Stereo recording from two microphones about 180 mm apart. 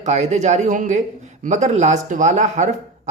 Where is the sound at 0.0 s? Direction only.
40° right (ahead or behind).